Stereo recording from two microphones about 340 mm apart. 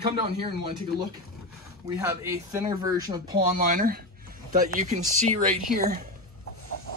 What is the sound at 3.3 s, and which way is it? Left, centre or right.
Speech, right.